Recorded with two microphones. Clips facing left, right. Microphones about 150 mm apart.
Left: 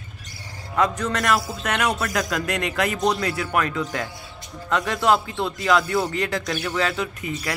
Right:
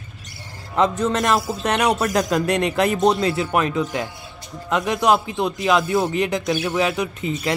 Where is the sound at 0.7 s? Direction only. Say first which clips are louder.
Right 3 dB; 25° right (ahead or behind).